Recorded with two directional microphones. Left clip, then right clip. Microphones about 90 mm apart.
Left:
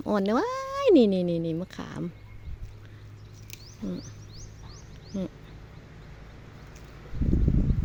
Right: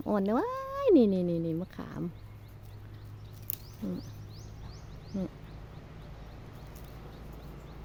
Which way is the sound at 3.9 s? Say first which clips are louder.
Left 3 dB; 65° right (ahead or behind).